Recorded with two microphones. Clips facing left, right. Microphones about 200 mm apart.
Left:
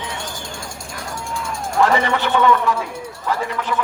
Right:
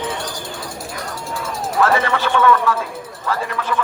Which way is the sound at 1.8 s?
15° left (ahead or behind).